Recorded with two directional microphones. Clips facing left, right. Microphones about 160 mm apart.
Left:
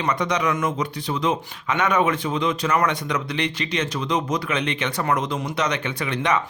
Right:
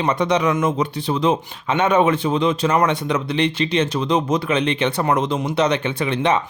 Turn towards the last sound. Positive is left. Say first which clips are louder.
# right 4 dB
turn(degrees=-30)  # may be behind; listen again after turning